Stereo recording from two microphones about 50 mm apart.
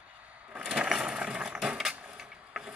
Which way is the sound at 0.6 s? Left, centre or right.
Centre.